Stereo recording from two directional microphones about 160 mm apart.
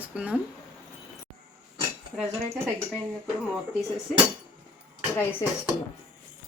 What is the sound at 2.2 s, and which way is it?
Speech, centre (ahead or behind).